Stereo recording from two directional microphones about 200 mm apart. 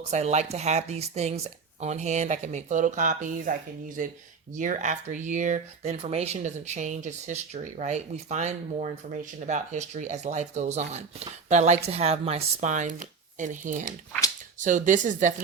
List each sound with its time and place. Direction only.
0.1 s speech: 35° right (ahead or behind)